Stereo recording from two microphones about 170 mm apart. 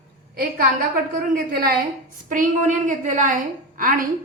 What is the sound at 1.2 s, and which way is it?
Speech, 60° right (ahead or behind).